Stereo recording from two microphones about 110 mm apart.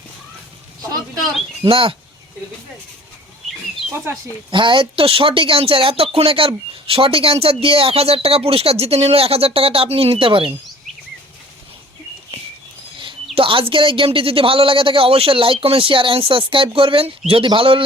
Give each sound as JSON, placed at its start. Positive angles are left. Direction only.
{"t": 1.6, "sound": "speech", "side_deg": -55}
{"t": 4.5, "sound": "speech", "side_deg": -45}
{"t": 13.3, "sound": "speech", "side_deg": -55}